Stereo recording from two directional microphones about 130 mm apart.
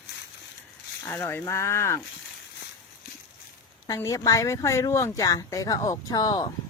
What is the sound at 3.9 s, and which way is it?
Speech, 25° left (ahead or behind).